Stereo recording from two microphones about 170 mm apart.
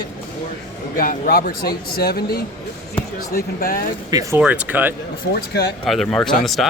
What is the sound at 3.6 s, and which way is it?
Speech, 55° left (ahead or behind).